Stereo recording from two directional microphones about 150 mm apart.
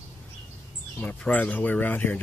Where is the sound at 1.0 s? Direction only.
10° left (ahead or behind).